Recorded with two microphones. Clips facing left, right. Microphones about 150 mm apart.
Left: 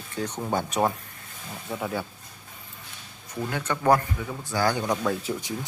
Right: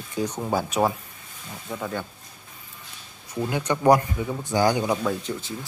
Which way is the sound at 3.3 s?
15° right (ahead or behind).